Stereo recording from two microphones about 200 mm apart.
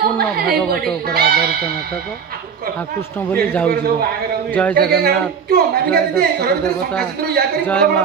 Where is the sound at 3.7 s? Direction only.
50° right (ahead or behind).